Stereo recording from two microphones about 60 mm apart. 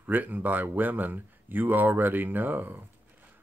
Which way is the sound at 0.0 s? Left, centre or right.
Right.